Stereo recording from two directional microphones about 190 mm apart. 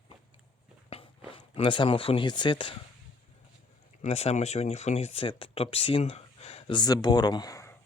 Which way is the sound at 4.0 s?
35° left (ahead or behind).